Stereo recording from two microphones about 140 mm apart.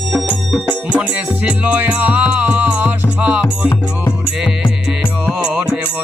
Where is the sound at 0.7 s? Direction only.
10° right (ahead or behind).